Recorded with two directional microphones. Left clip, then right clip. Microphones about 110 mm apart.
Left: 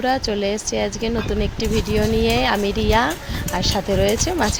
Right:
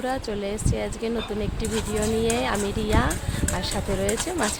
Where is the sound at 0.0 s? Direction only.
35° left (ahead or behind).